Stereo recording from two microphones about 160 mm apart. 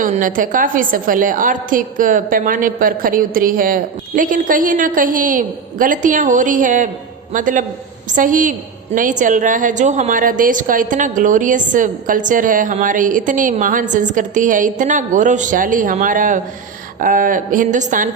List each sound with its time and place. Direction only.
0.0 s a woman's voice: 55° right (ahead or behind)